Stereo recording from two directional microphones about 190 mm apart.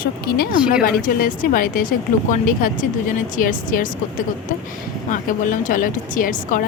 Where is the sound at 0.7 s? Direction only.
45° left (ahead or behind).